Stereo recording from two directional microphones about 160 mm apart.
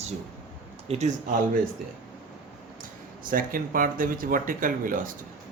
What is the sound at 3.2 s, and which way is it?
Speech, 60° right (ahead or behind).